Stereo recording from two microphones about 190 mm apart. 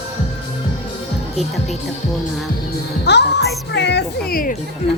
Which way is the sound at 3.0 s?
60° left (ahead or behind).